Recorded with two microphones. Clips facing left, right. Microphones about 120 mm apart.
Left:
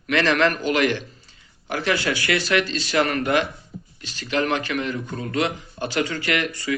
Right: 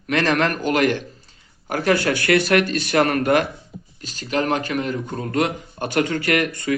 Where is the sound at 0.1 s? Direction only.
45° right (ahead or behind).